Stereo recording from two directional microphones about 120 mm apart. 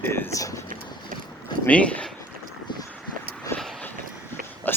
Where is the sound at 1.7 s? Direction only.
10° left (ahead or behind).